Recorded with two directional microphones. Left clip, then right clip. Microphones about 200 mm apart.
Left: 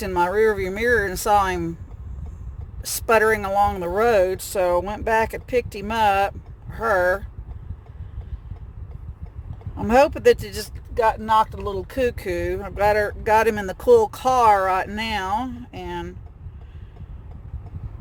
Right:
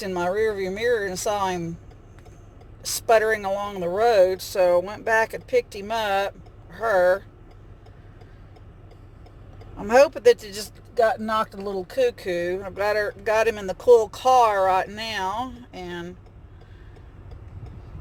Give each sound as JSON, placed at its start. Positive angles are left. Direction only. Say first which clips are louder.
{"t": 0.0, "sound": "speech", "louder": "left 4 dB", "side_deg": 45}
{"t": 3.1, "sound": "speech", "louder": "left 1 dB", "side_deg": 45}
{"t": 6.7, "sound": "speech", "louder": "even", "side_deg": 25}
{"t": 9.8, "sound": "speech", "louder": "even", "side_deg": 40}